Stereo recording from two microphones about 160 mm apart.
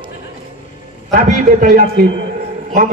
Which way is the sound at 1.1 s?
60° right (ahead or behind).